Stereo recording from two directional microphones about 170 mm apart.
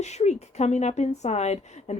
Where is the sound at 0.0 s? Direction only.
40° left (ahead or behind).